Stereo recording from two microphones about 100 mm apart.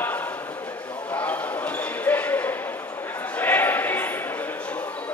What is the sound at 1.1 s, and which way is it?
Basketball bounce, 15° left (ahead or behind).